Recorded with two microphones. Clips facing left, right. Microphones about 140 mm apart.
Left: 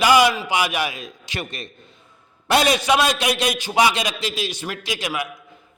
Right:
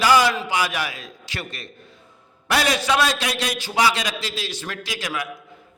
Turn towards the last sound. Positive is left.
turn(degrees=15)  # may be behind; listen again after turning